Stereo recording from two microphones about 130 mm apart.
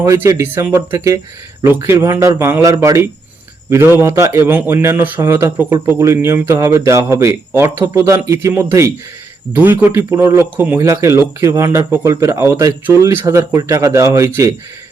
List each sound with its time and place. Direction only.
0.0 s speech: 25° right (ahead or behind)